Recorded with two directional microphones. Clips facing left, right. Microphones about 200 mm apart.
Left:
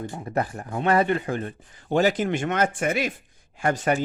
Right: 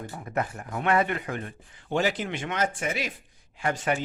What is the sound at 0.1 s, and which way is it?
Speech, 30° left (ahead or behind).